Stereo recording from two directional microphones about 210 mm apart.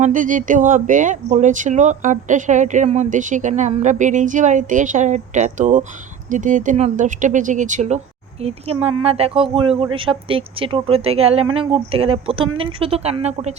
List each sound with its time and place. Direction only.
0.0 s speech: 40° right (ahead or behind)